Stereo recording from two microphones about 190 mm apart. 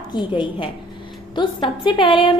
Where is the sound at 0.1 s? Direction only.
25° left (ahead or behind).